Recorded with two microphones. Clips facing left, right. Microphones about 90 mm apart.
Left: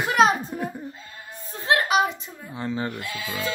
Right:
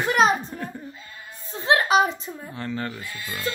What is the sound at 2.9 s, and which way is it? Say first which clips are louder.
Speech: left 3 dB; 70° left (ahead or behind).